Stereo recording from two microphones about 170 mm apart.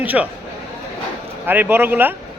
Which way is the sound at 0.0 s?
10° right (ahead or behind).